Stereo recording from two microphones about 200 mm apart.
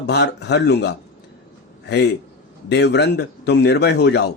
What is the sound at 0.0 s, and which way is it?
Speech, 60° left (ahead or behind).